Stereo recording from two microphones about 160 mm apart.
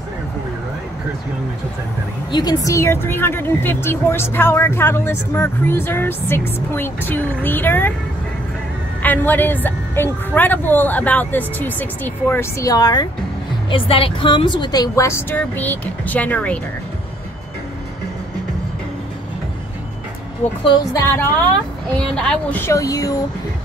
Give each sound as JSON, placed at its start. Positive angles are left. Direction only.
{"t": 2.3, "sound": "speech", "side_deg": 25}
{"t": 9.0, "sound": "a woman's voice", "side_deg": 10}
{"t": 20.6, "sound": "a woman's voice", "side_deg": 30}
{"t": 21.9, "sound": "speech", "side_deg": 5}